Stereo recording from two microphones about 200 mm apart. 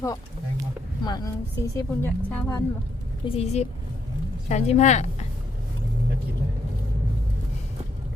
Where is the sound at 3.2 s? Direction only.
30° left (ahead or behind).